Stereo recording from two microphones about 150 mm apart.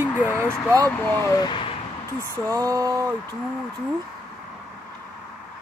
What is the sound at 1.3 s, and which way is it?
Speech, 30° left (ahead or behind).